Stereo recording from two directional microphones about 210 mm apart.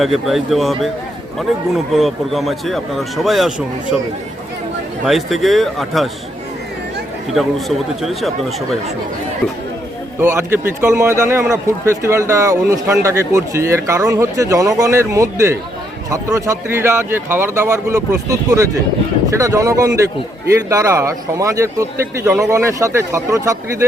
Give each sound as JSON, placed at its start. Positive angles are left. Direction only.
{"t": 0.0, "sound": "a man's voice", "side_deg": 0}
{"t": 5.0, "sound": "a man's voice", "side_deg": 0}
{"t": 8.0, "sound": "a man's voice", "side_deg": 0}
{"t": 10.2, "sound": "speech", "side_deg": -10}